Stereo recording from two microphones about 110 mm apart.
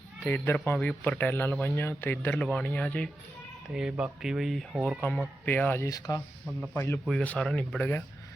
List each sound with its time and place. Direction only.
0.3 s speech: 15° left (ahead or behind)
3.8 s speech: 10° right (ahead or behind)
4.9 s speech: 10° left (ahead or behind)
5.9 s speech: 30° left (ahead or behind)
6.7 s speech: 20° left (ahead or behind)
7.1 s speech: 5° left (ahead or behind)
7.8 s speech: 20° left (ahead or behind)